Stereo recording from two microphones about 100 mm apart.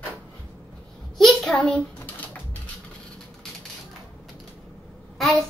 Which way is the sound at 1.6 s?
15° left (ahead or behind).